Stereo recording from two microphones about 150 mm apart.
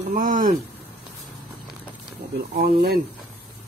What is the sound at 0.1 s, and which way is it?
Speech, 60° right (ahead or behind).